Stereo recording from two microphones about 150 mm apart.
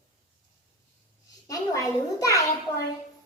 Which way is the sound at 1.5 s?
20° left (ahead or behind).